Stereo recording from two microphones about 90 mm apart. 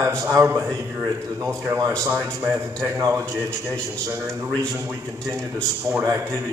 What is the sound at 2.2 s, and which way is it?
Speech, 30° right (ahead or behind).